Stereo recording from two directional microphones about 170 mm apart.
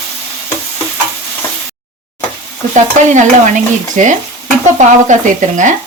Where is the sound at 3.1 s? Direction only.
45° right (ahead or behind).